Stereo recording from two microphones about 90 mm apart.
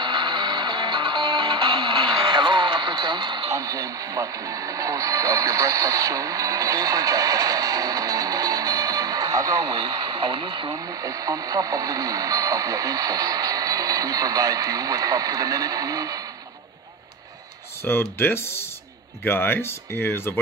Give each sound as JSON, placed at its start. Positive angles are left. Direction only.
{"t": 0.0, "sound": "music", "side_deg": -60}
{"t": 2.2, "sound": "radio", "side_deg": -55}
{"t": 3.4, "sound": "speech", "side_deg": -40}
{"t": 10.9, "sound": "speech", "side_deg": -40}
{"t": 17.8, "sound": "speech", "side_deg": 25}